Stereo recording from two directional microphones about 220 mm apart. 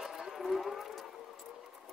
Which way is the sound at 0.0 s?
Centre (ahead or behind).